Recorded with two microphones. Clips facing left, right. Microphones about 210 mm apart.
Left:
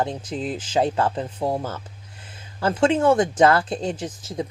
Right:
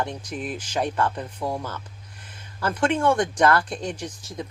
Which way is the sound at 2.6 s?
25° left (ahead or behind).